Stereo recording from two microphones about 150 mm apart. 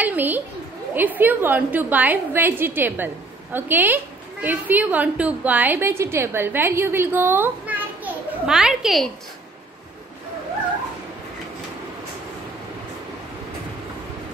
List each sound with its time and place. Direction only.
0.0 s a woman's voice: 10° right (ahead or behind)